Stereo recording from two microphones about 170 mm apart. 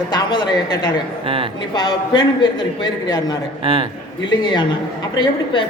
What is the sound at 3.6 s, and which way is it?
Speech, 30° right (ahead or behind).